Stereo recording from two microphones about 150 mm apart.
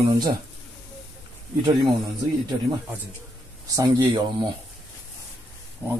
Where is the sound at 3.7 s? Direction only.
30° right (ahead or behind).